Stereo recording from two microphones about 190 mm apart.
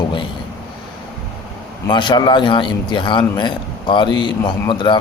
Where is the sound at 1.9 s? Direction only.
25° left (ahead or behind).